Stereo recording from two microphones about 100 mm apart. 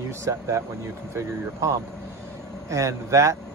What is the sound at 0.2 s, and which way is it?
Speech, 30° right (ahead or behind).